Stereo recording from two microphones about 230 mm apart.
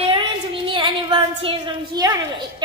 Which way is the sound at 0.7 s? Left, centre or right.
Right.